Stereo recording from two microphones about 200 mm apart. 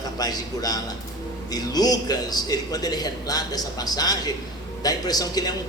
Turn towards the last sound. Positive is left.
turn(degrees=20)  # may be behind; listen again after turning